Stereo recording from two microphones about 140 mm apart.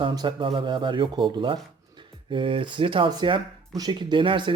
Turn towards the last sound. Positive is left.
turn(degrees=-35)  # may be behind; listen again after turning